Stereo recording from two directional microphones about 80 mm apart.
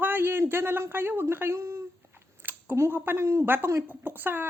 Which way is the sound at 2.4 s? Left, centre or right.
Right.